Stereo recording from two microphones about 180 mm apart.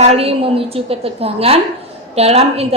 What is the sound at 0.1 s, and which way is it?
A woman's voice, 35° right (ahead or behind).